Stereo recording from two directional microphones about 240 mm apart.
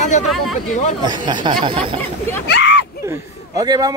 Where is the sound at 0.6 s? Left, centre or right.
Left.